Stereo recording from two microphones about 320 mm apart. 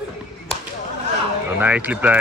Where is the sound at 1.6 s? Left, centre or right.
Centre.